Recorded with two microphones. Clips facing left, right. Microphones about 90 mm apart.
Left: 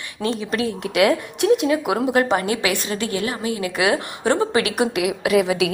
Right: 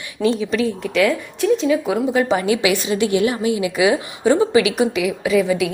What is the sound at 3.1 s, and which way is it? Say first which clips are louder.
Speech: right 6 dB; 35° left (ahead or behind).